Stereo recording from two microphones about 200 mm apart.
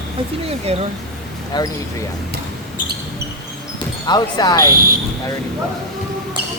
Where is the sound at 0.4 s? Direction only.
30° right (ahead or behind).